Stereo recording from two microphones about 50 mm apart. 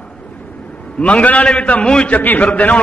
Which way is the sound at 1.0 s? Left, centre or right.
Left.